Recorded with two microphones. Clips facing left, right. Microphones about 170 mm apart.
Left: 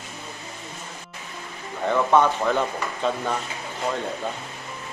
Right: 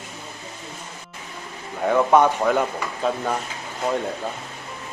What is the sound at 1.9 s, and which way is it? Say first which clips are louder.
Speech: right 3 dB; 15° right (ahead or behind).